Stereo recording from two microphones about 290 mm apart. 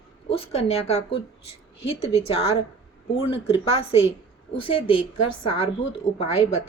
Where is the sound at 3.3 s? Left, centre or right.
Centre.